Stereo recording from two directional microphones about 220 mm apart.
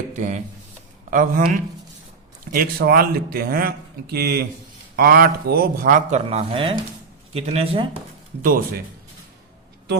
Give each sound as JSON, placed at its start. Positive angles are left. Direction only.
{"t": 0.1, "sound": "speech", "side_deg": -35}
{"t": 2.4, "sound": "speech", "side_deg": -40}
{"t": 8.4, "sound": "speech", "side_deg": -40}